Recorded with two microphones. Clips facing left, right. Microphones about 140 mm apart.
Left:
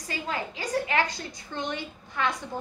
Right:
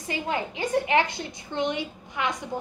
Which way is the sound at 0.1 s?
20° right (ahead or behind).